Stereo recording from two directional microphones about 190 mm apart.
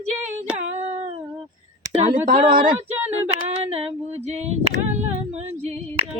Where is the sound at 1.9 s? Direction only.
35° right (ahead or behind).